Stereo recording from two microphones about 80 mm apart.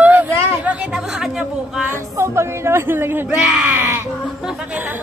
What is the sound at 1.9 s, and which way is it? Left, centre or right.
Speech, right.